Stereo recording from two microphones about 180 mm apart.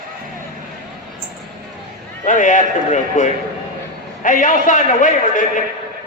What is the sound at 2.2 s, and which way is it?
A man's voice, 45° left (ahead or behind).